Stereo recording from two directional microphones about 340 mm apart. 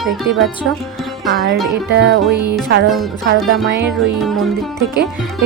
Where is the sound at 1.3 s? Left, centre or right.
Right.